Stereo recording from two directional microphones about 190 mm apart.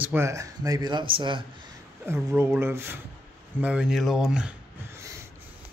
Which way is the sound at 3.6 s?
5° right (ahead or behind).